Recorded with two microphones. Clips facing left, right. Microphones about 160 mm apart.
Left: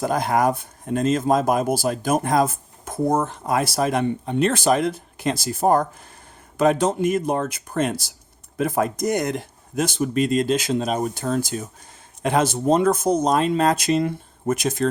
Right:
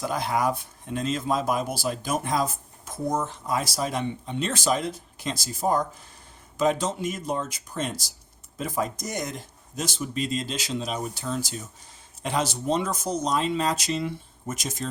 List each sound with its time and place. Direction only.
0.0 s speech: 50° left (ahead or behind)